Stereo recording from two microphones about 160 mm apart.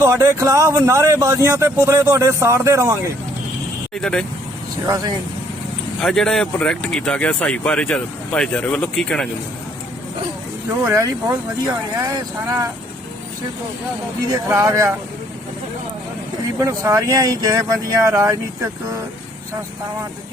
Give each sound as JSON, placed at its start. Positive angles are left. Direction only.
{"t": 0.0, "sound": "speech", "side_deg": -20}
{"t": 3.9, "sound": "speech", "side_deg": 5}
{"t": 6.0, "sound": "speech", "side_deg": 5}
{"t": 10.8, "sound": "speech", "side_deg": -20}
{"t": 14.3, "sound": "speech", "side_deg": -15}
{"t": 16.6, "sound": "speech", "side_deg": -20}